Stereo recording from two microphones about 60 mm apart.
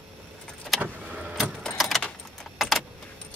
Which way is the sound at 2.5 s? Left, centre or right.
Centre.